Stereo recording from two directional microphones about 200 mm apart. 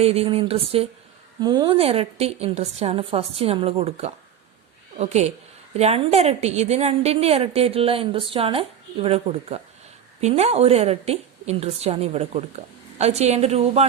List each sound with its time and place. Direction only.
0.0 s a woman's voice: 30° right (ahead or behind)